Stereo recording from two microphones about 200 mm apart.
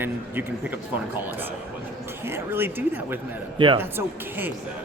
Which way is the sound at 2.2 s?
10° right (ahead or behind).